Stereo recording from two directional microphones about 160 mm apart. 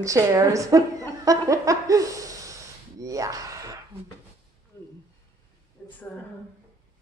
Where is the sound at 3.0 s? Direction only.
20° right (ahead or behind).